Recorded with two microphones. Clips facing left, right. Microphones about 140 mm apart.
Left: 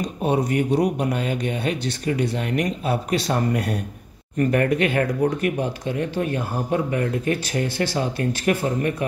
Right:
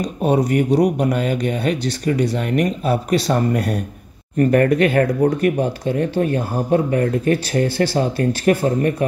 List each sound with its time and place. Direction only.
0.7 s speech: 35° right (ahead or behind)